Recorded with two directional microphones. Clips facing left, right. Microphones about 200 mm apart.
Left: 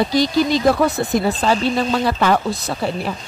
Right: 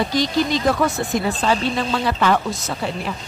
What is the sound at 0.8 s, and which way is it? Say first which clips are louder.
Speech: left 3 dB; 35° left (ahead or behind).